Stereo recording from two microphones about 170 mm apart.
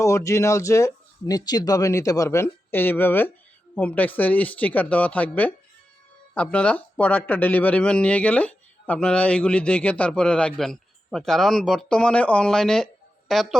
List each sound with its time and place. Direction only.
0.0 s speech: 15° left (ahead or behind); by 13.6 s centre (ahead or behind)